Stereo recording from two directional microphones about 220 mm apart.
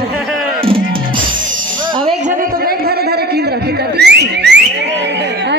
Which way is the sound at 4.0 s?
50° right (ahead or behind).